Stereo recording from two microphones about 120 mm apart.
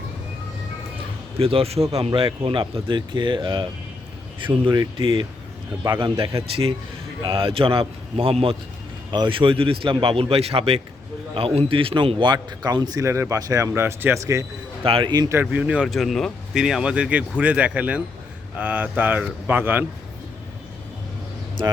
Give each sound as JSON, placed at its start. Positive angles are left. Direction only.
{"t": 1.4, "sound": "a man's voice", "side_deg": -50}
{"t": 14.8, "sound": "speech", "side_deg": -50}
{"t": 15.3, "sound": "speech", "side_deg": -15}